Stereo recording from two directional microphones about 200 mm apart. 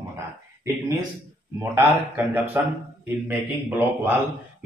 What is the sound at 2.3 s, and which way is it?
A man's voice, 10° right (ahead or behind).